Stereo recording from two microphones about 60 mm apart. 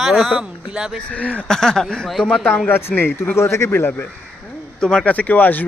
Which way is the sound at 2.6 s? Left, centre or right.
Left.